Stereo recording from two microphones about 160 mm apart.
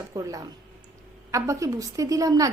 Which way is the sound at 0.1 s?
25° right (ahead or behind).